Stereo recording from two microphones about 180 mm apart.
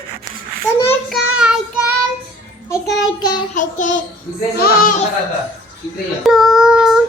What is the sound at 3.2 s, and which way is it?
Child singing, 25° left (ahead or behind).